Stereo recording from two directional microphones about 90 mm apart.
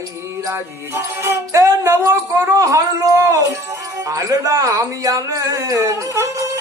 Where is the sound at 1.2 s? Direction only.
35° right (ahead or behind).